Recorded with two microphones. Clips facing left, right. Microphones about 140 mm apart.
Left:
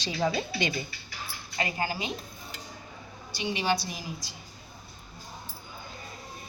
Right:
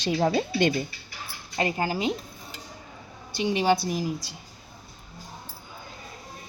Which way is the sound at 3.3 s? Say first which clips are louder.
Right 6 dB; 55° right (ahead or behind).